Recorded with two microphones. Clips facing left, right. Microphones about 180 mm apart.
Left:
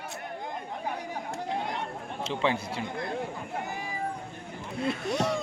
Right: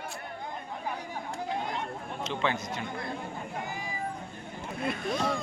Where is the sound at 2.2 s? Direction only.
30° left (ahead or behind).